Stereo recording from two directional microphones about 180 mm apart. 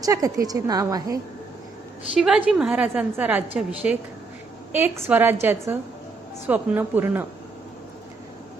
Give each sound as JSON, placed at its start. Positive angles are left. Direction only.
{"t": 0.0, "sound": "a woman's voice", "side_deg": -20}
{"t": 2.1, "sound": "a woman's voice", "side_deg": -5}